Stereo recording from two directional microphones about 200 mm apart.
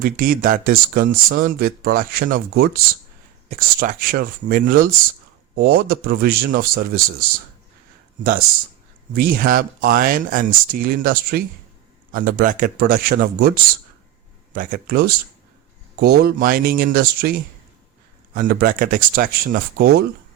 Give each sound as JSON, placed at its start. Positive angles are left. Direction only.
{"t": 0.0, "sound": "speech", "side_deg": -45}
{"t": 9.1, "sound": "speech", "side_deg": -45}
{"t": 18.3, "sound": "speech", "side_deg": -45}